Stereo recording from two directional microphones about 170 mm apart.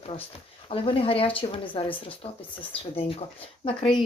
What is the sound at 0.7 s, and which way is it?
Speech, 35° left (ahead or behind).